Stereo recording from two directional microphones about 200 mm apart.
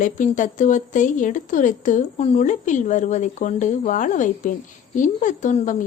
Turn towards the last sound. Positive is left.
turn(degrees=40)  # may be behind; listen again after turning